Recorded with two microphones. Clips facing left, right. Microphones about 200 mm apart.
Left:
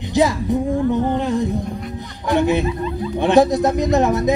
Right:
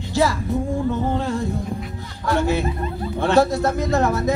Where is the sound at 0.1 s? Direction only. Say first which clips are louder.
Left 3 dB; 20° left (ahead or behind).